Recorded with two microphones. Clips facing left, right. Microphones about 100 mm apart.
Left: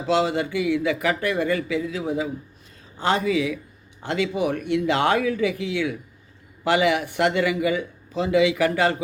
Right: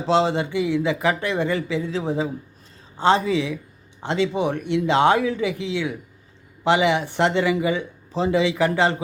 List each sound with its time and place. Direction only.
0.0 s speech: 25° right (ahead or behind)